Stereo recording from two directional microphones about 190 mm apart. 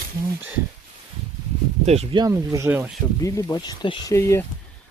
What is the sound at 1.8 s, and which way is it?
Speech, 35° right (ahead or behind).